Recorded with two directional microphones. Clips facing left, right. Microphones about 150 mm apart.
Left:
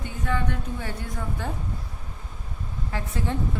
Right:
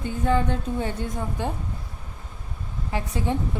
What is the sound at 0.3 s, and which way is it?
A woman's voice, 30° right (ahead or behind).